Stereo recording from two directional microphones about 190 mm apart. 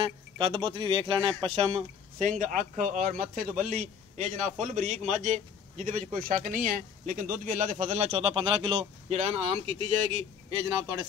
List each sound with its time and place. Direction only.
0.0 s a man's voice: 25° right (ahead or behind)
10.6 s a man's voice: 25° right (ahead or behind)